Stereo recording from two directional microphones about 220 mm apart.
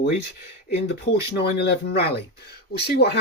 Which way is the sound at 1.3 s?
50° left (ahead or behind).